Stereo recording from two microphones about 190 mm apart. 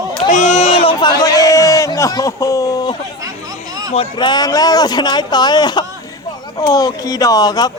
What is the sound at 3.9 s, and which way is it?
Speech, 30° left (ahead or behind).